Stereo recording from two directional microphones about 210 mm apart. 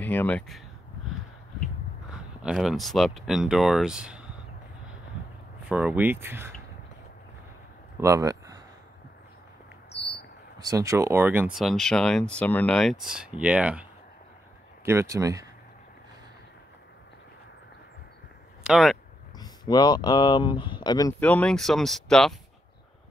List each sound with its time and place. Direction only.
0.0 s speech: 10° left (ahead or behind)
2.4 s speech: centre (ahead or behind)
5.7 s speech: 5° right (ahead or behind)
8.0 s speech: 15° right (ahead or behind)
9.9 s a sound: 50° left (ahead or behind)
10.6 s speech: 15° right (ahead or behind)
14.9 s speech: 15° right (ahead or behind)
18.6 s speech: centre (ahead or behind)
19.3 s speech: 20° left (ahead or behind)
21.2 s speech: 5° left (ahead or behind)